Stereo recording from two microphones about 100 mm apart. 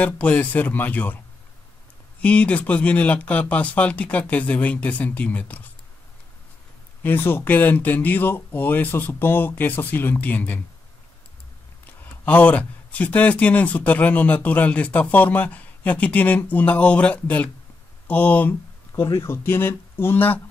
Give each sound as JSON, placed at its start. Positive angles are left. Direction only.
{"t": 0.0, "sound": "speech", "side_deg": 15}
{"t": 2.2, "sound": "speech", "side_deg": 10}
{"t": 7.0, "sound": "speech", "side_deg": 20}
{"t": 11.8, "sound": "speech", "side_deg": 20}